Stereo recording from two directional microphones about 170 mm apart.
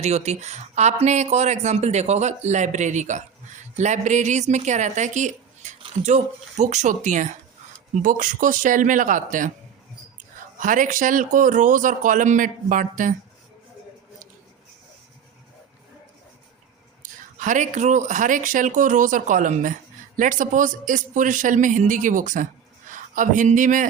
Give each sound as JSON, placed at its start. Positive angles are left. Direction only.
{"t": 0.0, "sound": "speech", "side_deg": -40}
{"t": 10.6, "sound": "speech", "side_deg": -50}
{"t": 17.0, "sound": "speech", "side_deg": -50}